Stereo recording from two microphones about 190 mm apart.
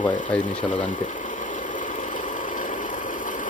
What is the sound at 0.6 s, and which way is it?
Speech, 40° left (ahead or behind).